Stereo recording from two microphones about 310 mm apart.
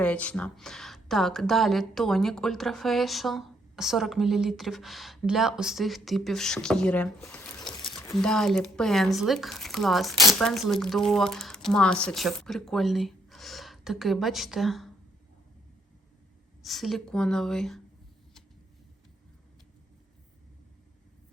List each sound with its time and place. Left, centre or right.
0.0 s a woman's voice: centre
16.6 s a woman's voice: centre